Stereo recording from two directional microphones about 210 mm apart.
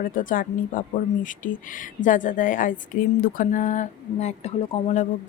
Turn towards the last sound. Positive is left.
turn(degrees=30)  # may be behind; listen again after turning